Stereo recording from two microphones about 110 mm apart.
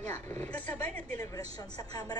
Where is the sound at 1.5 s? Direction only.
35° left (ahead or behind).